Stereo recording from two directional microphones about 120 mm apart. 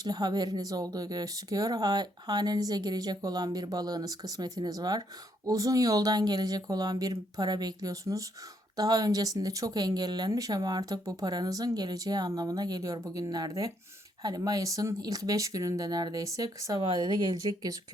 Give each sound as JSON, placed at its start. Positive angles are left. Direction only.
{"t": 0.0, "sound": "speech", "side_deg": -35}